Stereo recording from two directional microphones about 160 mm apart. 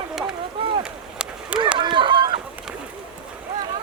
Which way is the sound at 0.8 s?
5° right (ahead or behind).